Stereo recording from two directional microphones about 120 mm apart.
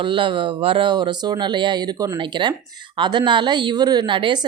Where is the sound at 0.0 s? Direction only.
45° right (ahead or behind).